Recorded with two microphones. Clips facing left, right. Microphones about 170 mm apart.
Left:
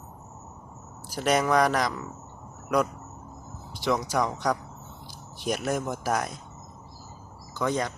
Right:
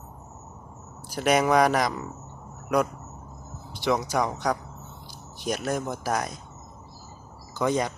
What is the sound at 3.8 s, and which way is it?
Speech, 5° right (ahead or behind).